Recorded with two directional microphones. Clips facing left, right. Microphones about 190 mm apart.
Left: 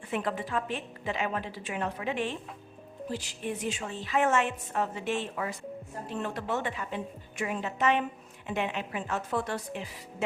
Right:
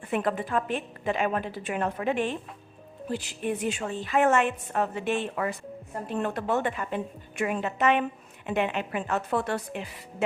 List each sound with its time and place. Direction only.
0.1 s a woman's voice: 55° right (ahead or behind)